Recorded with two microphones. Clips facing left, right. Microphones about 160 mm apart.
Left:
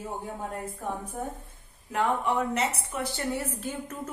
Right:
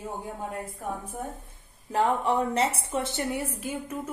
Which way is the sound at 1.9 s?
30° right (ahead or behind).